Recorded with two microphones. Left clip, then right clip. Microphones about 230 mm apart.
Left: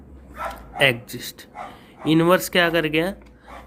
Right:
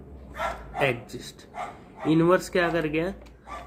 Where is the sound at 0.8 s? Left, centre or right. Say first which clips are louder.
Left 7 dB; left.